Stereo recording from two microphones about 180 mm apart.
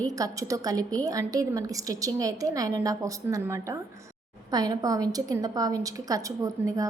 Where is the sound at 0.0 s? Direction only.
20° right (ahead or behind).